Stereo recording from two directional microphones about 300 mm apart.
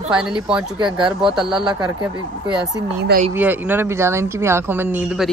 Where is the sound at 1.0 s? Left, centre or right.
Centre.